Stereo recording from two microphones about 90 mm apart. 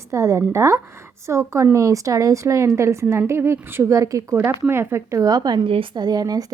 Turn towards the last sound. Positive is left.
turn(degrees=-45)  # may be behind; listen again after turning